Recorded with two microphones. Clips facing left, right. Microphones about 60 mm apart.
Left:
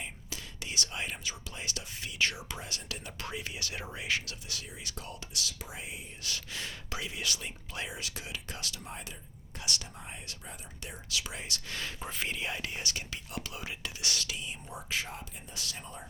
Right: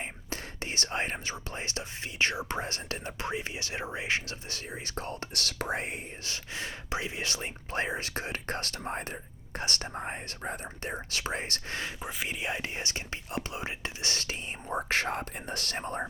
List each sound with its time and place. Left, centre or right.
0.0 s speech: right
6.2 s speech: right
11.9 s speech: centre
12.4 s speech: right